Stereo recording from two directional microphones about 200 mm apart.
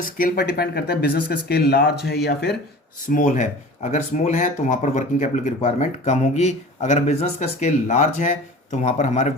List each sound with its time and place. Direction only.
0.0 s speech: 45° left (ahead or behind)
3.1 s speech: 40° left (ahead or behind)